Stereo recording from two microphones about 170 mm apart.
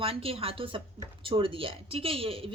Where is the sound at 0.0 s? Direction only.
35° right (ahead or behind).